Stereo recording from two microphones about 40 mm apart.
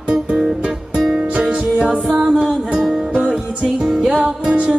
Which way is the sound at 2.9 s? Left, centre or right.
Right.